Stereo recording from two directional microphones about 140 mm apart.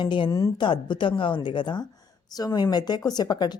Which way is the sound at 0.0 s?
35° left (ahead or behind).